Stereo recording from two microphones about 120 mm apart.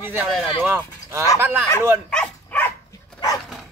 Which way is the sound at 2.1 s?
10° left (ahead or behind).